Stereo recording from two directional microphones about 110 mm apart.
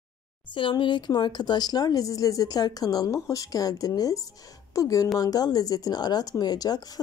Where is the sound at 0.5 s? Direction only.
50° left (ahead or behind).